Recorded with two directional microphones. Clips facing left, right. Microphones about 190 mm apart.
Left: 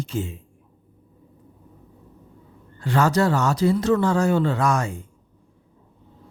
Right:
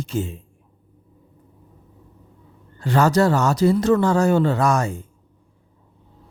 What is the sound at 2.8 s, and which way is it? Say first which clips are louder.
Speech: right 3 dB; 40° right (ahead or behind).